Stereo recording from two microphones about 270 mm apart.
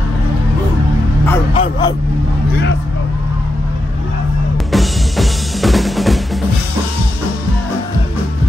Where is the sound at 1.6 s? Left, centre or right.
Centre.